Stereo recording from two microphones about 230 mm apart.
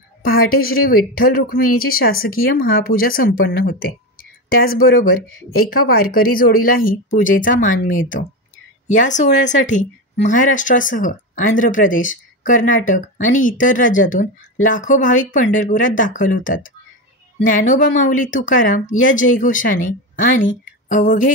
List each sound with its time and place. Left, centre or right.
0.2 s a woman's voice: left